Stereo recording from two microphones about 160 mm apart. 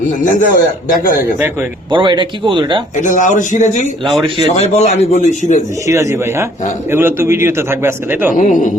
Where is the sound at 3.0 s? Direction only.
55° left (ahead or behind).